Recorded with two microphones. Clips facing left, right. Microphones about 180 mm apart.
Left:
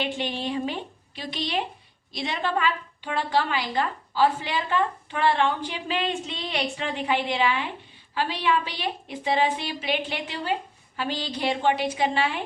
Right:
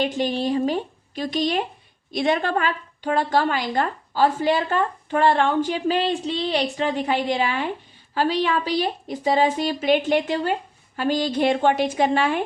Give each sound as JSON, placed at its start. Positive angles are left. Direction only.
{"t": 0.0, "sound": "a woman's voice", "side_deg": -40}